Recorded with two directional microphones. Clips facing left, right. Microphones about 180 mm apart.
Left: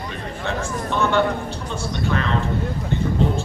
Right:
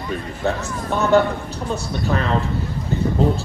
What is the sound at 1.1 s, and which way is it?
Speech, 40° right (ahead or behind).